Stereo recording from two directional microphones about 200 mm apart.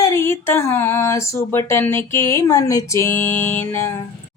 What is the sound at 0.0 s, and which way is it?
A woman's voice, 15° left (ahead or behind).